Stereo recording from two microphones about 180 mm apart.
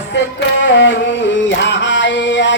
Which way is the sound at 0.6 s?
90° left.